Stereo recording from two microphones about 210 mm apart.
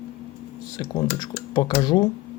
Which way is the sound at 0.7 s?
20° left (ahead or behind).